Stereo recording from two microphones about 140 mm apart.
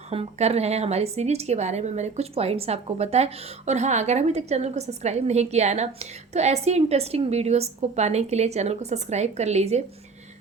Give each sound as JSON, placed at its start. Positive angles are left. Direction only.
{"t": 0.1, "sound": "a woman's voice", "side_deg": -50}